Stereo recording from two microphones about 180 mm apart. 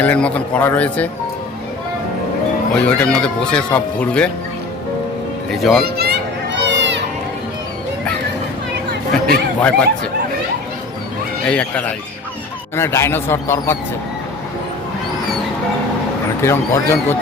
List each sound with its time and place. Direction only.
0.0 s speech: 5° left (ahead or behind)
2.7 s speech: 5° left (ahead or behind)
5.8 s children playing: 60° right (ahead or behind); by 7.0 s 80° right
9.2 s speech: 5° left (ahead or behind)
11.4 s speech: 5° left (ahead or behind)
16.4 s speech: 15° left (ahead or behind)